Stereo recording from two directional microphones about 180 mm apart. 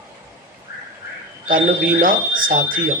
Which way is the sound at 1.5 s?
50° right (ahead or behind).